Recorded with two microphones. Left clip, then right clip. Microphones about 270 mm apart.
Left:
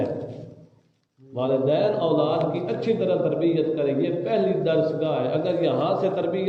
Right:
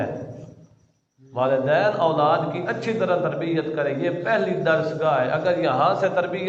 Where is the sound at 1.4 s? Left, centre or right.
Right.